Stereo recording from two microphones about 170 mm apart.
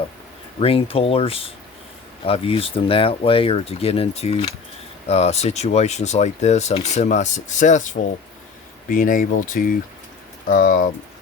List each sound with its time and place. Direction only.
0.6 s speech: 35° left (ahead or behind); by 10.8 s 50° left (ahead or behind)